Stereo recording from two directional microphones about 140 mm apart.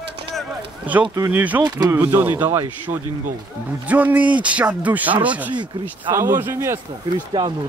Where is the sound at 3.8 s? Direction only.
10° right (ahead or behind).